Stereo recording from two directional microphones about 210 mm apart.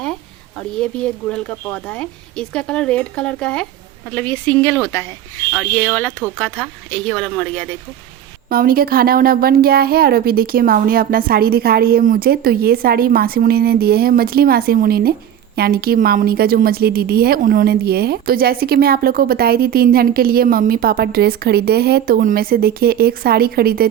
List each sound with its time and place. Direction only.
0.8 s speech: 5° left (ahead or behind)
8.4 s a woman's voice: 45° right (ahead or behind)